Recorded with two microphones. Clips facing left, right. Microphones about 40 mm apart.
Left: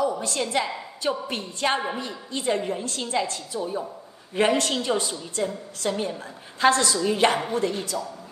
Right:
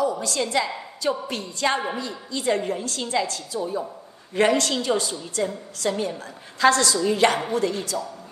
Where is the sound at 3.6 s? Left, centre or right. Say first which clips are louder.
Right 2 dB; left.